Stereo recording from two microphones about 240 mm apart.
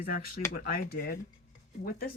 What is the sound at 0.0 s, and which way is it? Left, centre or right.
Speech, left.